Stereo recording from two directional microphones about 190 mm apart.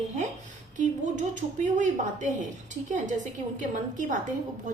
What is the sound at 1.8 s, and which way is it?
Speech, 40° right (ahead or behind).